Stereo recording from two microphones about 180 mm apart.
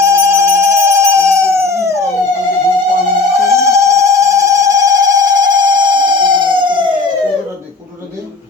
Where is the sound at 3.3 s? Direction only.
15° right (ahead or behind).